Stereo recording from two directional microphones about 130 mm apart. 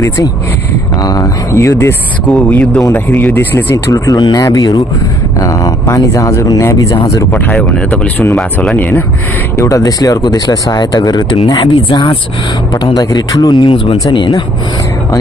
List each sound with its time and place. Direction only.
1.0 s speech: 25° left (ahead or behind)
7.3 s speech: 10° left (ahead or behind)
9.6 s speech: 25° left (ahead or behind)